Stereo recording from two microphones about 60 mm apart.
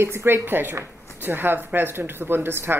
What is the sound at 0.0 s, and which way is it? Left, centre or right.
A woman's voice, right.